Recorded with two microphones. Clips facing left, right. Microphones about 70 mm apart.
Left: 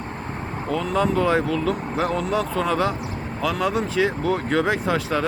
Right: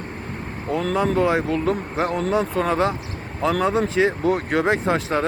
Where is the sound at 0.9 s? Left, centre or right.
Right.